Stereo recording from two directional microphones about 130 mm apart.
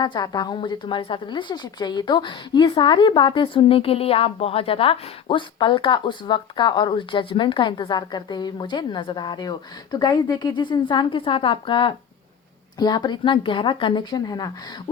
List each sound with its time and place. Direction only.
0.0 s a woman's voice: 35° left (ahead or behind)